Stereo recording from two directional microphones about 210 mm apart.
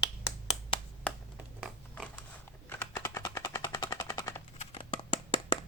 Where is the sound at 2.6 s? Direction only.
10° left (ahead or behind).